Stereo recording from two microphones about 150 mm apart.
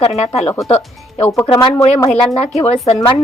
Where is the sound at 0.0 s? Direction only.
45° left (ahead or behind).